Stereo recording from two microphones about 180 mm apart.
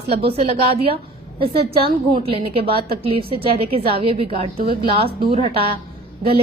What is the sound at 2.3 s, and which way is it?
A woman's voice, 30° right (ahead or behind).